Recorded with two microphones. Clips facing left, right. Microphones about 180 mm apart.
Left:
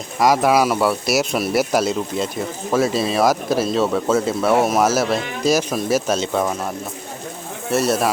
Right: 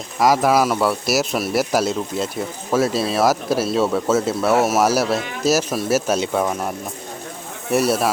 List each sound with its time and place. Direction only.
0.2 s speech: centre (ahead or behind)
7.7 s speech: 10° right (ahead or behind)